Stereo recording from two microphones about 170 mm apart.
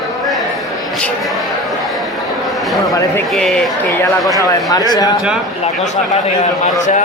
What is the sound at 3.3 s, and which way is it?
Speech, 5° left (ahead or behind).